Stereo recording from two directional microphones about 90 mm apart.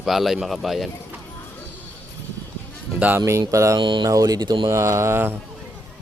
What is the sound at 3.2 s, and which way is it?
Speech, 35° right (ahead or behind).